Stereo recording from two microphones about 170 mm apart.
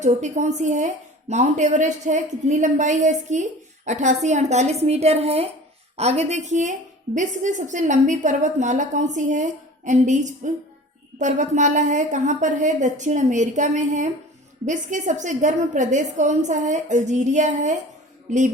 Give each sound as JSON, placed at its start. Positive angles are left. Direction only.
{"t": 0.0, "sound": "a woman's voice", "side_deg": -45}